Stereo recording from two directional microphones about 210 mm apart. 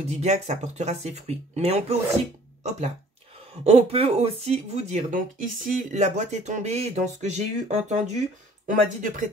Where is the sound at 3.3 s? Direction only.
30° right (ahead or behind).